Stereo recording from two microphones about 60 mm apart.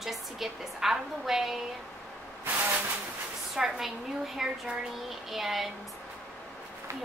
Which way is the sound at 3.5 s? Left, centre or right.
Centre.